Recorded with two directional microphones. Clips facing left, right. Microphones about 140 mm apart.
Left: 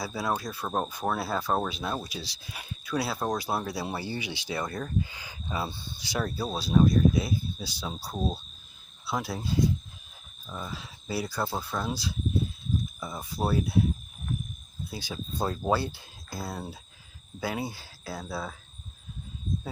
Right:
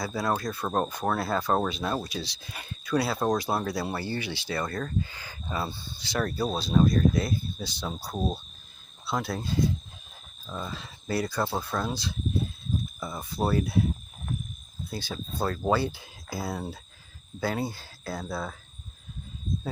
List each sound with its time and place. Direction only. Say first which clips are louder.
0.0 s speech: right 2 dB; 5° left (ahead or behind)
14.8 s speech: right 2 dB; 10° left (ahead or behind)
15.6 s speech: right 3 dB; centre (ahead or behind)